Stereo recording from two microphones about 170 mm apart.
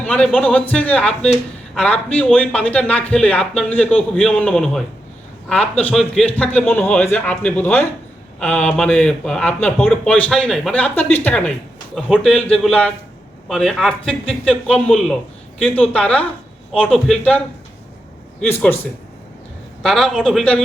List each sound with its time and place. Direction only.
0.0 s a man's voice: 5° left (ahead or behind)
5.8 s a man's voice: centre (ahead or behind)
19.8 s speech: 5° left (ahead or behind)